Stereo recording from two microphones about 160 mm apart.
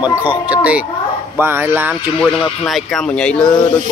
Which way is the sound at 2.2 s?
Centre (ahead or behind).